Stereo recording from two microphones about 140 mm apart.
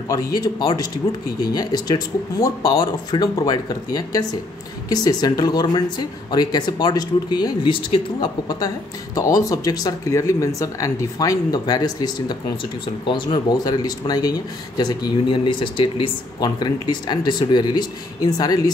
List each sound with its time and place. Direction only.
0.1 s speech: 25° left (ahead or behind)